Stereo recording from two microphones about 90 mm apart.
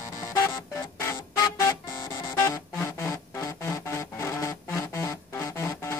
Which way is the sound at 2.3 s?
30° left (ahead or behind).